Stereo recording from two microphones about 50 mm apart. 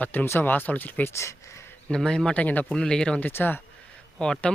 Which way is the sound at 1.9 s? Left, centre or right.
Centre.